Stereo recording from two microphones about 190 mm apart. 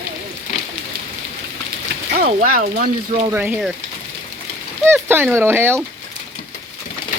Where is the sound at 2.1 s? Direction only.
50° right (ahead or behind).